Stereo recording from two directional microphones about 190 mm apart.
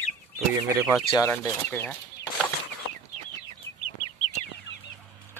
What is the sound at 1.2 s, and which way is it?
Speech, 15° left (ahead or behind).